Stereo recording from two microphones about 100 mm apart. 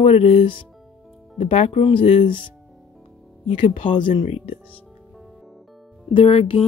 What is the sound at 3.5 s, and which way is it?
Speech, 90° left.